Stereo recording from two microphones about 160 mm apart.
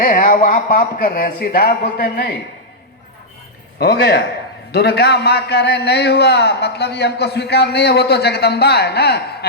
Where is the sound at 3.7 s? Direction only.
90° left.